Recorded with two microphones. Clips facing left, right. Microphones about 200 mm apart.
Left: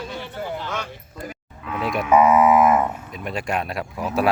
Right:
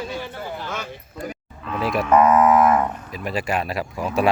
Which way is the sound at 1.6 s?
Centre (ahead or behind).